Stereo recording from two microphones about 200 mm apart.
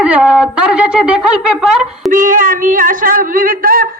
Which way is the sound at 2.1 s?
40° right (ahead or behind).